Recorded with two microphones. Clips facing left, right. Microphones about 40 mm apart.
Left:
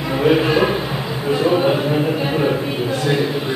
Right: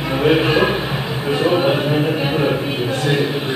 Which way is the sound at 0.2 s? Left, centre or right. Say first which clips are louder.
Even; centre.